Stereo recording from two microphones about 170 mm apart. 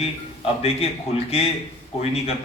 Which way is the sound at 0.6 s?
35° left (ahead or behind).